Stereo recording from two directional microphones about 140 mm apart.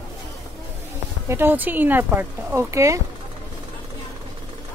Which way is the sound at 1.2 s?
15° right (ahead or behind).